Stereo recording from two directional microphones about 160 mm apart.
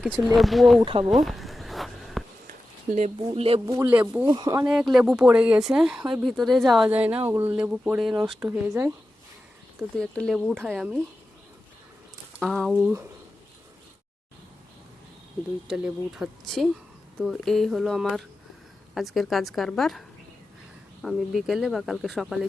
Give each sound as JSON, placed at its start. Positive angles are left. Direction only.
{"t": 0.3, "sound": "speech", "side_deg": 0}
{"t": 1.2, "sound": "a sound", "side_deg": 0}
{"t": 2.5, "sound": "a sound", "side_deg": -50}
{"t": 3.2, "sound": "speech", "side_deg": -35}
{"t": 3.7, "sound": "speech", "side_deg": -15}
{"t": 4.3, "sound": "speech", "side_deg": -25}
{"t": 4.6, "sound": "speech", "side_deg": -5}
{"t": 9.7, "sound": "speech", "side_deg": 5}
{"t": 12.4, "sound": "speech", "side_deg": 0}
{"t": 15.6, "sound": "speech", "side_deg": -5}